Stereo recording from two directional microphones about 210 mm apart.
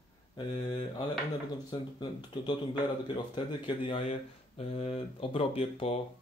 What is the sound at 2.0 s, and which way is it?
Speech, 20° left (ahead or behind).